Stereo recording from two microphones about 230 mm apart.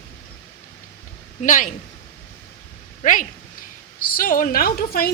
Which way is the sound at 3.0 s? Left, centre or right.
Left.